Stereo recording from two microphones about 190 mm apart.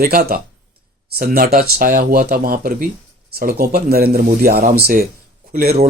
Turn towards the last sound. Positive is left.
turn(degrees=-50)  # may be behind; listen again after turning